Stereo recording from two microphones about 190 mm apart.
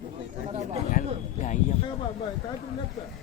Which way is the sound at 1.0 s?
50° left (ahead or behind).